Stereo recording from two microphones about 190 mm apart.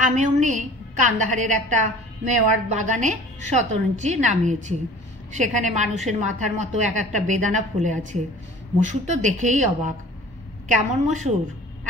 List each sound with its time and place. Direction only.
0.0 s a woman's voice: 40° right (ahead or behind)